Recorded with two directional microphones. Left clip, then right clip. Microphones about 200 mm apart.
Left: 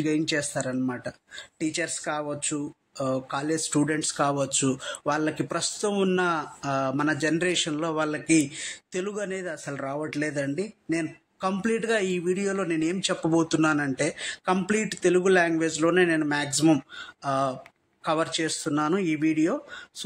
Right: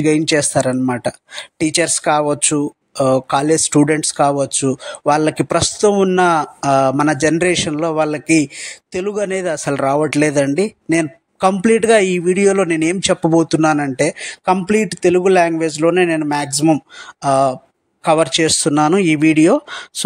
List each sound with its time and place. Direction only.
0.0 s speech: 40° right (ahead or behind)